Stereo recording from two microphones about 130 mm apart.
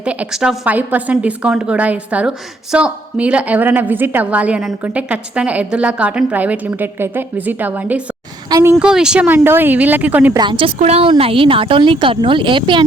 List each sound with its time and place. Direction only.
0.0 s a woman's voice: 10° right (ahead or behind)
10.3 s a woman's voice: 35° right (ahead or behind)
10.8 s a woman's voice: 55° right (ahead or behind)